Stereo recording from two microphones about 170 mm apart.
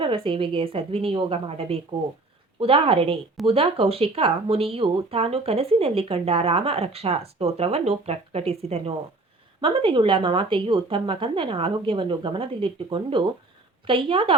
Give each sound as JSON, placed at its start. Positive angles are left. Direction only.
{"t": 0.0, "sound": "speech", "side_deg": -30}